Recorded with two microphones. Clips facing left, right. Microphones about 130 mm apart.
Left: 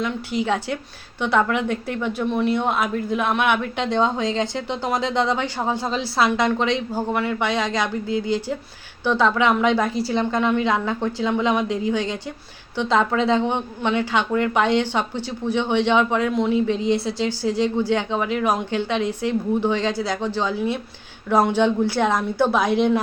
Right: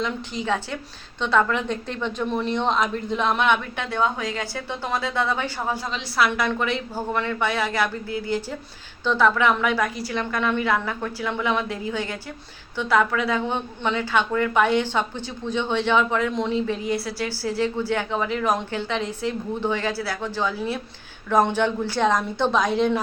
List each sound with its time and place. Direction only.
0.0 s a woman's voice: 10° left (ahead or behind)